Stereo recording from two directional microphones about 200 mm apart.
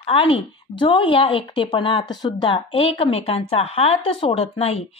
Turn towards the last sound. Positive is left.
turn(degrees=30)  # may be behind; listen again after turning